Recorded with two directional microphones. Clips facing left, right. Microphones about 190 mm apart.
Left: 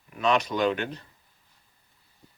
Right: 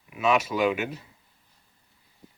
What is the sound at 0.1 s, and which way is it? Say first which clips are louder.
Speech: right 1 dB; 5° right (ahead or behind).